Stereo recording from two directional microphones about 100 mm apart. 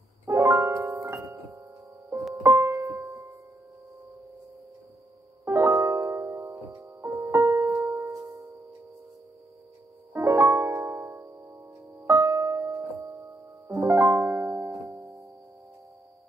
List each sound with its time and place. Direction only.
0.2 s music: 30° right (ahead or behind)
2.4 s music: 25° right (ahead or behind)
5.4 s music: 25° right (ahead or behind)
8.0 s music: 30° right (ahead or behind)
10.1 s music: 25° right (ahead or behind)
13.7 s piano: 25° right (ahead or behind)
14.3 s music: 20° right (ahead or behind)